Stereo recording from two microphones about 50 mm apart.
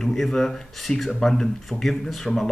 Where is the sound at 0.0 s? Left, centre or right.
Centre.